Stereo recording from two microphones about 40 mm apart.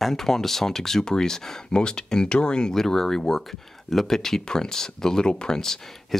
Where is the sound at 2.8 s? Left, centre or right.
Centre.